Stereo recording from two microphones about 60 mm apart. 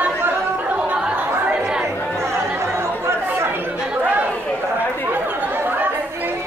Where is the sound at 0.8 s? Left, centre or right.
Centre.